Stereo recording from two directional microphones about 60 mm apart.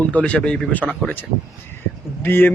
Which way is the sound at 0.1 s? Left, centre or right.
Left.